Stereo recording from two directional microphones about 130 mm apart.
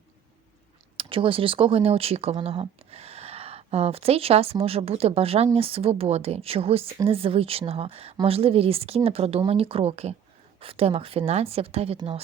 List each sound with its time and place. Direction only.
0.9 s speech: 45° right (ahead or behind)